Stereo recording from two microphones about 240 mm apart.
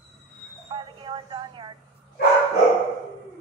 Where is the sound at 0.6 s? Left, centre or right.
Right.